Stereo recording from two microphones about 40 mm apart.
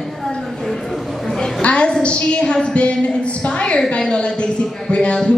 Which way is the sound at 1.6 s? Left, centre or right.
Left.